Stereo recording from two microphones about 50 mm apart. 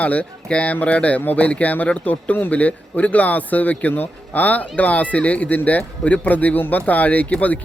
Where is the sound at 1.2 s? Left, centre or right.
Left.